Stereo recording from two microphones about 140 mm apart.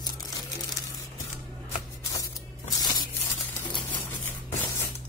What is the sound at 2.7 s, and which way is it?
Tearing, 25° left (ahead or behind).